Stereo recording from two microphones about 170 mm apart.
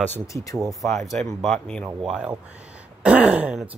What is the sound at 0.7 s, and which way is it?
Speech, centre (ahead or behind).